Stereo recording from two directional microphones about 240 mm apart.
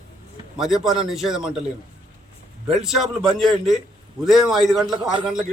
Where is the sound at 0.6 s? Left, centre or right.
Centre.